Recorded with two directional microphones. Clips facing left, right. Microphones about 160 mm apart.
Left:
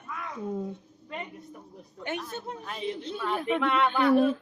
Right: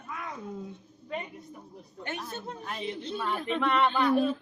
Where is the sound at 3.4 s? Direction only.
5° left (ahead or behind).